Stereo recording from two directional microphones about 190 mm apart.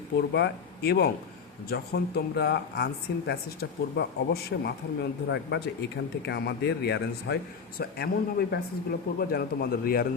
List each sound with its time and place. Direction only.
0.3 s speech: 60° left (ahead or behind)